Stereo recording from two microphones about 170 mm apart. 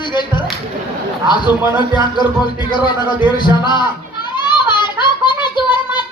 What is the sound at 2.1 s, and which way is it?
Speech, 25° left (ahead or behind).